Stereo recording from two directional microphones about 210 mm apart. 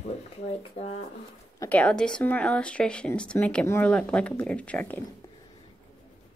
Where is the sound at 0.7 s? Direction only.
30° left (ahead or behind).